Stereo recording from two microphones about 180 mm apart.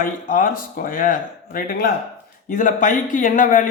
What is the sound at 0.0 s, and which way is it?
Speech, 50° left (ahead or behind).